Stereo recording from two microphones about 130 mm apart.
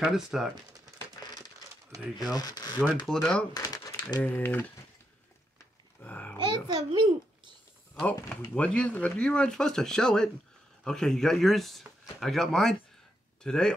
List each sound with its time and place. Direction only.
0.0 s speech: 5° right (ahead or behind)
2.3 s speech: 30° left (ahead or behind)
3.1 s speech: 5° left (ahead or behind)
3.5 s crumpling: 30° left (ahead or behind)
4.2 s speech: 15° left (ahead or behind)
5.9 s babbling: 10° left (ahead or behind)
6.3 s a sound: 35° right (ahead or behind)
7.9 s speech: 10° left (ahead or behind)